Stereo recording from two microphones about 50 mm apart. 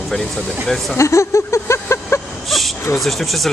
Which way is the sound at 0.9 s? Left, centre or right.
Left.